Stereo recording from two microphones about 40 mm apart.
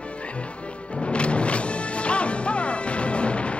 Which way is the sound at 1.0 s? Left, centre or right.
Left.